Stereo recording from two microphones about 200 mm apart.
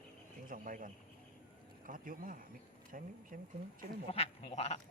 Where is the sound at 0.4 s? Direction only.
40° right (ahead or behind).